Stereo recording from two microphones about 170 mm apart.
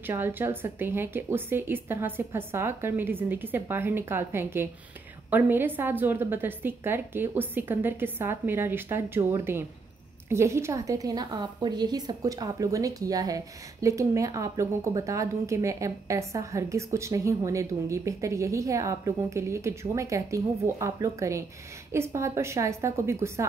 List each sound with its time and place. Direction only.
0.0 s a woman's voice: 10° right (ahead or behind)